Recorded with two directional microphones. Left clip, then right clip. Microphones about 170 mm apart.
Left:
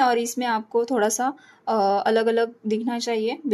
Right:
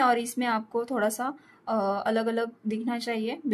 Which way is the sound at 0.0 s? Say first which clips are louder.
Left 3 dB; 10° left (ahead or behind).